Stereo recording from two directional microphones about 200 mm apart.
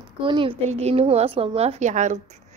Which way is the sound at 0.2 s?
25° right (ahead or behind).